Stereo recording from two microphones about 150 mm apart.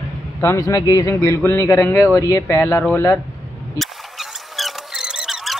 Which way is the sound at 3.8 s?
Centre (ahead or behind).